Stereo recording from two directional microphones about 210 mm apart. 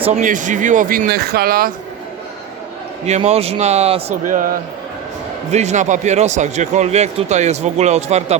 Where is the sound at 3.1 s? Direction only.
30° right (ahead or behind).